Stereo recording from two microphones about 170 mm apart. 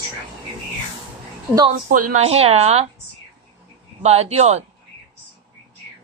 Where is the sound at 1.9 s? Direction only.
50° right (ahead or behind).